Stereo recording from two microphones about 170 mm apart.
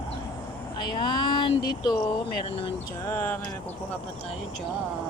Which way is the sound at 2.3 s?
30° left (ahead or behind).